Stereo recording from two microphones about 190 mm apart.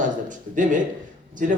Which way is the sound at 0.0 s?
40° right (ahead or behind).